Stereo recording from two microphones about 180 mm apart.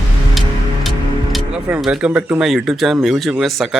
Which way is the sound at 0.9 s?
Centre (ahead or behind).